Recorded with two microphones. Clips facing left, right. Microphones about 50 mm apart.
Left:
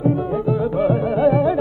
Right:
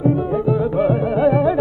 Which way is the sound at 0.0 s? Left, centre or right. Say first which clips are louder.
Right 2 dB; centre.